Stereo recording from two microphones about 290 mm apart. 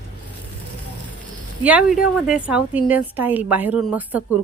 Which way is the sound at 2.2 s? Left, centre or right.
Centre.